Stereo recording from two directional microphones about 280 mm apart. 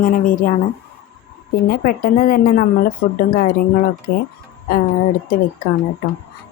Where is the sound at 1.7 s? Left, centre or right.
Left.